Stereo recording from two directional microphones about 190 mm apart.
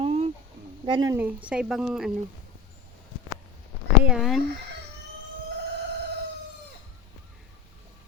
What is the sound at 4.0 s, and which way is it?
Speech, 5° right (ahead or behind).